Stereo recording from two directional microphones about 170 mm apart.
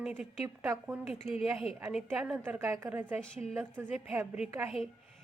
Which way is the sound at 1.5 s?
5° right (ahead or behind).